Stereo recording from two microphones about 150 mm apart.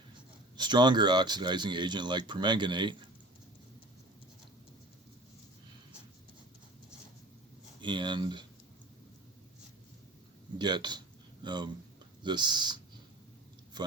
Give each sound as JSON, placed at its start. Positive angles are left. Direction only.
{"t": 0.5, "sound": "speech", "side_deg": -30}
{"t": 7.8, "sound": "speech", "side_deg": -30}
{"t": 10.6, "sound": "speech", "side_deg": -30}
{"t": 13.7, "sound": "a sound", "side_deg": -30}